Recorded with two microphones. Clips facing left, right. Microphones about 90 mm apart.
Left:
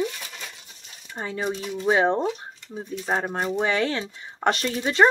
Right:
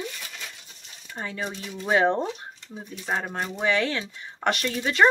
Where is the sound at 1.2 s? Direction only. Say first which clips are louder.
Left 4 dB; 25° left (ahead or behind).